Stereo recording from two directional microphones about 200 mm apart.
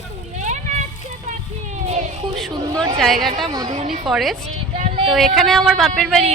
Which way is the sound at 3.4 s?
20° right (ahead or behind).